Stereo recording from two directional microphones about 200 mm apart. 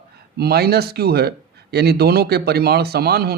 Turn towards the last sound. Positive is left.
turn(degrees=-50)  # may be behind; listen again after turning